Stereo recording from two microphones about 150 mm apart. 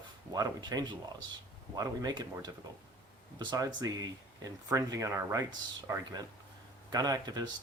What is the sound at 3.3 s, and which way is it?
Speech, 25° right (ahead or behind).